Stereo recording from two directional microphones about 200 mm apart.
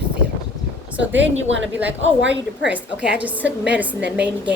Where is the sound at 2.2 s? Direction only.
60° right (ahead or behind).